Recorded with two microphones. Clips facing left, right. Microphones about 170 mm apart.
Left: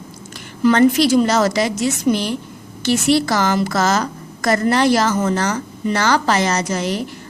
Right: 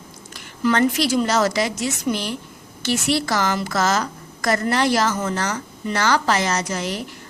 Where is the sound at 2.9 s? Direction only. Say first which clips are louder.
Left 5 dB; 30° left (ahead or behind).